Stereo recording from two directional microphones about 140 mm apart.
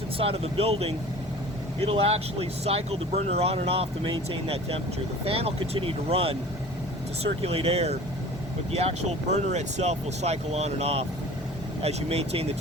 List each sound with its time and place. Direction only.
0.2 s speech: 40° right (ahead or behind)
7.4 s speech: 45° right (ahead or behind)